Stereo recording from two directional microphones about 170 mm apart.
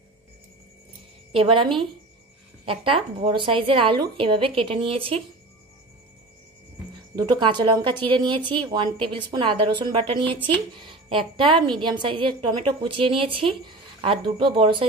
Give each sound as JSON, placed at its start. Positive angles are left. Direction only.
{"t": 1.3, "sound": "a woman's voice", "side_deg": -30}
{"t": 7.2, "sound": "a woman's voice", "side_deg": -25}